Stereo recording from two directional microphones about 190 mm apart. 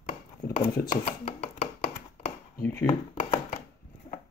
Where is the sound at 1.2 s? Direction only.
35° left (ahead or behind).